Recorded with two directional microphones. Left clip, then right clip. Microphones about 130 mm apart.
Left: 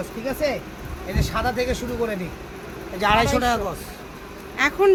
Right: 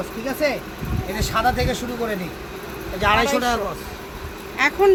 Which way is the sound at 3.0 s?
70° left (ahead or behind).